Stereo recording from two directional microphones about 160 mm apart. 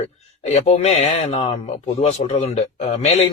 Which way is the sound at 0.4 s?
45° left (ahead or behind).